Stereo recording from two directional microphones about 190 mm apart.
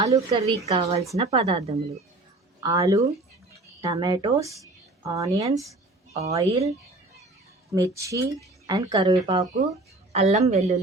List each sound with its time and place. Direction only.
0.3 s speech: 30° right (ahead or behind)
2.6 s a woman's voice: 15° right (ahead or behind)
7.7 s speech: 15° right (ahead or behind); by 10.8 s 35° right (ahead or behind)